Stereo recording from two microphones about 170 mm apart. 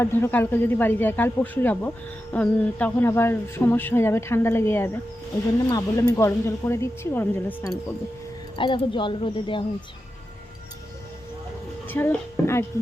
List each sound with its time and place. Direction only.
0.0 s speech: 15° left (ahead or behind)
8.5 s speech: 30° left (ahead or behind)
11.9 s a woman's voice: 15° left (ahead or behind)